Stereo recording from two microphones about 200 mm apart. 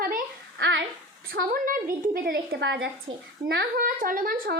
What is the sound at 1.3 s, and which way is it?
A woman's voice, 45° right (ahead or behind).